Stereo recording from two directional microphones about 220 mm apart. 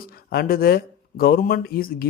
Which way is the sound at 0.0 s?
45° left (ahead or behind).